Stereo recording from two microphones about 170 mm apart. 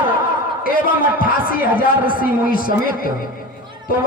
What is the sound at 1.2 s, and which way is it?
A man's voice, 60° left (ahead or behind).